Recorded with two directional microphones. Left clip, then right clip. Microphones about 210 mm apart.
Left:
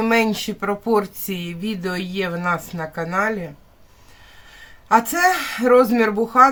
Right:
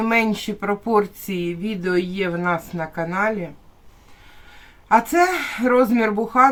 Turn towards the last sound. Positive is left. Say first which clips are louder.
# left 2 dB
turn(degrees=15)  # may be behind; listen again after turning